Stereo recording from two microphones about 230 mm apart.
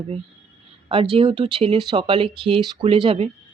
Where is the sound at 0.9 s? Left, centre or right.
Right.